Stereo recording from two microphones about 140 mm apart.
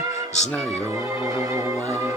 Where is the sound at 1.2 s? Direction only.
20° right (ahead or behind).